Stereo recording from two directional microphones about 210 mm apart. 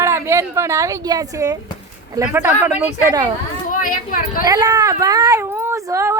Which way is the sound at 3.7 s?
40° left (ahead or behind).